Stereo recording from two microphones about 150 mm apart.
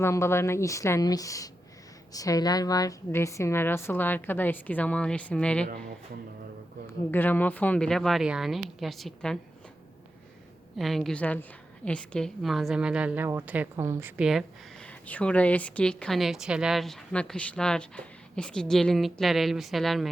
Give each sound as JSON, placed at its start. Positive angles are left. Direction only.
{"t": 0.0, "sound": "a woman's voice", "side_deg": 15}
{"t": 7.1, "sound": "speech", "side_deg": 15}
{"t": 10.8, "sound": "a woman's voice", "side_deg": 0}
{"t": 14.2, "sound": "speech", "side_deg": 0}